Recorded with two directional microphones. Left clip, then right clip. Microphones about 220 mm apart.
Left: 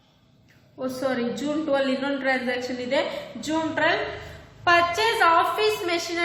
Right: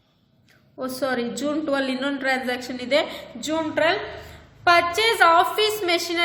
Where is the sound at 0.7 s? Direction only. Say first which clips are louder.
Right 1 dB; 50° right (ahead or behind).